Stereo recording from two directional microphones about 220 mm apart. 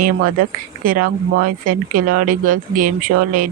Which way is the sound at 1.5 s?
35° right (ahead or behind).